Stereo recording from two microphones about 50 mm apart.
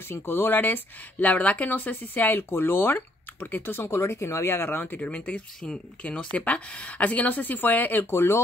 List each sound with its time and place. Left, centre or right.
0.1 s speech: left
4.0 s speech: left
4.5 s speech: left
8.1 s speech: left